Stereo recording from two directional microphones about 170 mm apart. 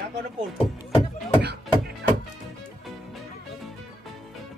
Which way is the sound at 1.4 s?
75° right (ahead or behind).